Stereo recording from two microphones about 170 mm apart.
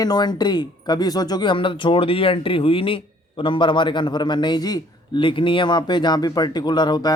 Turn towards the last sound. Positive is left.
turn(degrees=25)  # may be behind; listen again after turning